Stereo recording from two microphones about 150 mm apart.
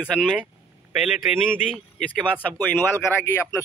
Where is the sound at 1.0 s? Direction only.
Centre (ahead or behind).